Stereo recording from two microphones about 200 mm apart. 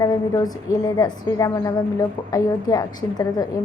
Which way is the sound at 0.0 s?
20° left (ahead or behind).